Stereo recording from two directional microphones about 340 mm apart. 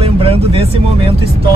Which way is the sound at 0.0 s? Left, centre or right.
Centre.